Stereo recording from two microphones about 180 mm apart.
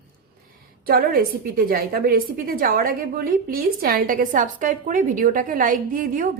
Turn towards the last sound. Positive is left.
turn(degrees=-50)  # may be behind; listen again after turning